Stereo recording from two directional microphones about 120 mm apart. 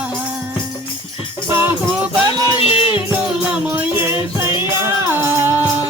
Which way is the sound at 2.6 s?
55° left (ahead or behind).